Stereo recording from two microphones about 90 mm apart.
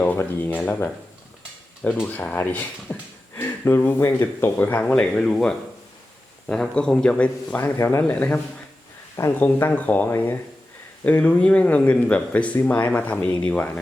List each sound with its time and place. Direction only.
0.0 s speech: 25° left (ahead or behind)
2.0 s speech: 20° left (ahead or behind)
9.4 s speech: 25° left (ahead or behind)